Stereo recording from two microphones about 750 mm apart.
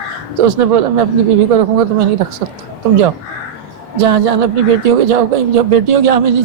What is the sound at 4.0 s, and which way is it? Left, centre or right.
Speech, right.